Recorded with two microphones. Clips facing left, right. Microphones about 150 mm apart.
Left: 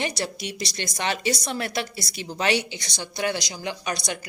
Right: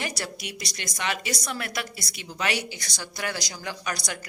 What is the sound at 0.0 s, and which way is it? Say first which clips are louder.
A woman's voice: left 5 dB; 25° left (ahead or behind).